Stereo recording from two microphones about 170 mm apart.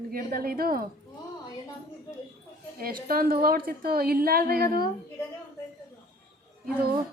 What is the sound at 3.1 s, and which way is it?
A woman's voice, 60° right (ahead or behind).